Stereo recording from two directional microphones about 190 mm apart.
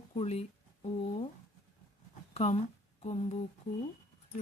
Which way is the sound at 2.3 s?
35° left (ahead or behind).